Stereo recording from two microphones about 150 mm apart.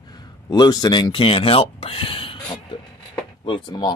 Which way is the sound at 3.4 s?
30° left (ahead or behind).